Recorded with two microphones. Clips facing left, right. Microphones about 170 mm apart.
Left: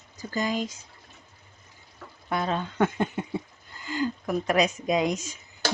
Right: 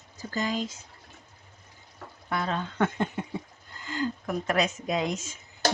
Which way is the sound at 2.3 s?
20° left (ahead or behind).